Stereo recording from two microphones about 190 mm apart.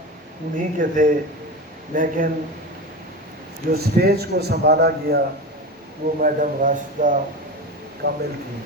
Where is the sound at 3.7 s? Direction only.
55° right (ahead or behind).